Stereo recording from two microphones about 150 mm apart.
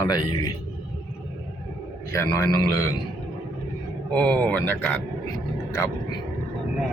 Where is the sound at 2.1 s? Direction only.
20° left (ahead or behind).